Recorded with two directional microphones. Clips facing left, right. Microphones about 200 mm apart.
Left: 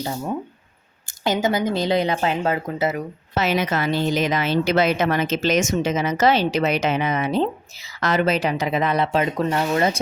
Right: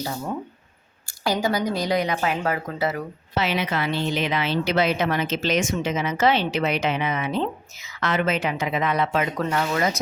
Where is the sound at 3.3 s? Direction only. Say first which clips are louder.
Left 3 dB; 45° left (ahead or behind).